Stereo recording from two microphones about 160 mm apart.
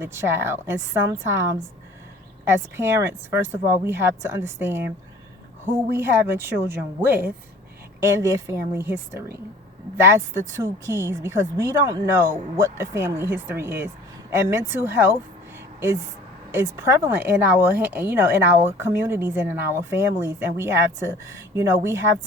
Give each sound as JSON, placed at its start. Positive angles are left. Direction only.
{"t": 0.0, "sound": "speech", "side_deg": -15}
{"t": 5.9, "sound": "speech", "side_deg": -15}
{"t": 16.5, "sound": "speech", "side_deg": -15}